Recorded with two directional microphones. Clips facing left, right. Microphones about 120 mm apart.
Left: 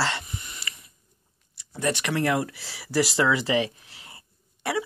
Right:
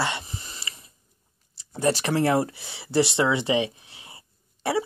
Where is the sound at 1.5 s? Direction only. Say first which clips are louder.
Right 4 dB; 30° right (ahead or behind).